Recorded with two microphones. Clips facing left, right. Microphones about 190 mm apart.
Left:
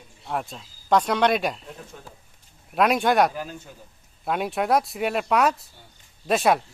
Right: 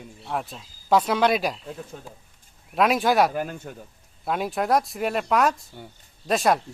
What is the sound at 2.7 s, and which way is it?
Speech, centre (ahead or behind).